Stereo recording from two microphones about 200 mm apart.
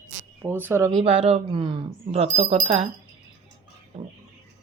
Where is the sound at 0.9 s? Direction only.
30° right (ahead or behind).